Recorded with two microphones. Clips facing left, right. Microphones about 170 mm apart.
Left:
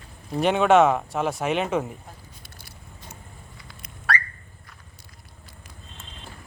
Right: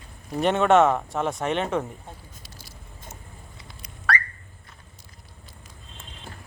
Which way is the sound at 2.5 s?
60° left (ahead or behind).